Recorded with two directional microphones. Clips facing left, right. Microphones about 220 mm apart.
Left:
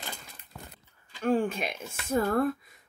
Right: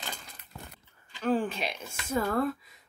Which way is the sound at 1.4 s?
50° left (ahead or behind).